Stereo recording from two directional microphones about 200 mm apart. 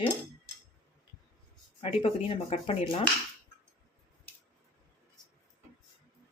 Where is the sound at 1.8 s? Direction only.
30° left (ahead or behind).